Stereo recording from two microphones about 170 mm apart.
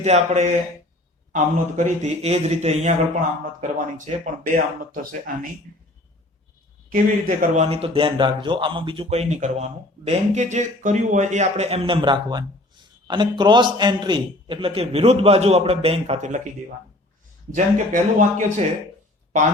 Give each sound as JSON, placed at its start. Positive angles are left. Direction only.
{"t": 0.0, "sound": "speech", "side_deg": -40}
{"t": 6.9, "sound": "speech", "side_deg": -50}
{"t": 17.5, "sound": "speech", "side_deg": -45}